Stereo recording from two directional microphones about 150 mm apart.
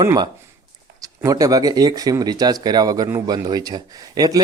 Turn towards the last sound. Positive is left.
turn(degrees=-25)  # may be behind; listen again after turning